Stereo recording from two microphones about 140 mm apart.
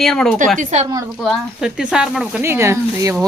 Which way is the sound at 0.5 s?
55° right (ahead or behind).